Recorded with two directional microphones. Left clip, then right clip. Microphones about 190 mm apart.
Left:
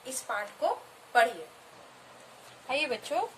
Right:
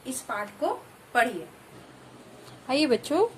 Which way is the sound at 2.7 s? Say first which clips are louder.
Right 6 dB; 40° right (ahead or behind).